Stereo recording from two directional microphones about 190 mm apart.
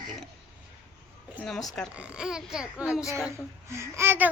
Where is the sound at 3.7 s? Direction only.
15° right (ahead or behind).